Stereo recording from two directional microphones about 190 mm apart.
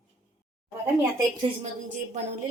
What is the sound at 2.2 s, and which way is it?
Speech, 40° right (ahead or behind).